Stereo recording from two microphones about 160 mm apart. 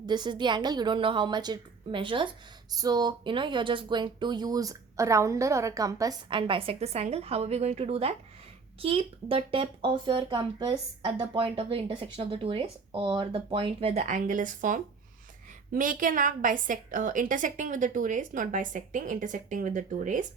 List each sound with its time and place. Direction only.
0.0 s a woman's voice: 25° right (ahead or behind); by 20.2 s 55° right (ahead or behind)